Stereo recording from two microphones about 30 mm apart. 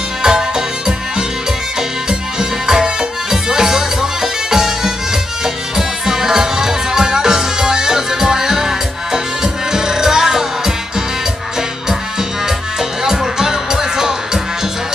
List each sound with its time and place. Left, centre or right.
0.2 s music: centre
13.0 s music: centre